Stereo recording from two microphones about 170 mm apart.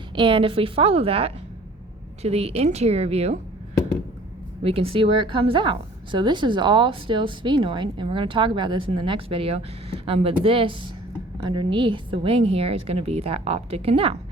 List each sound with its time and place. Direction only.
0.2 s a woman's voice: 30° right (ahead or behind)
4.6 s a woman's voice: 35° right (ahead or behind)